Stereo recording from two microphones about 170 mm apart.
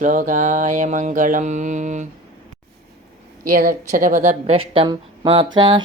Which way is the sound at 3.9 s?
50° right (ahead or behind).